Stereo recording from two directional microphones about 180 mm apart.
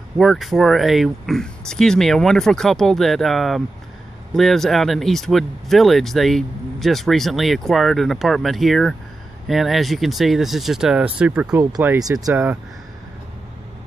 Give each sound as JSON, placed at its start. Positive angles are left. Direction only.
{"t": 0.2, "sound": "speech", "side_deg": 0}